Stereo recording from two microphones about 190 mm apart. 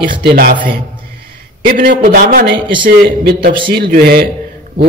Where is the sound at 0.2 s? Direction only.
55° right (ahead or behind).